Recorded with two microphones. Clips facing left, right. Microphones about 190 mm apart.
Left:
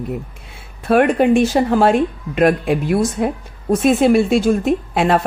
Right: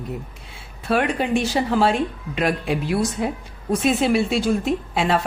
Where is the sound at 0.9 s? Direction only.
55° left (ahead or behind).